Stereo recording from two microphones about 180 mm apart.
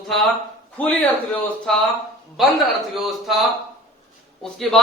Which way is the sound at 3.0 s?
Centre (ahead or behind).